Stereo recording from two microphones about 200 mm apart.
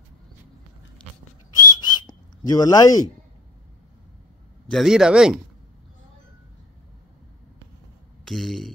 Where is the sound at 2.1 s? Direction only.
20° left (ahead or behind).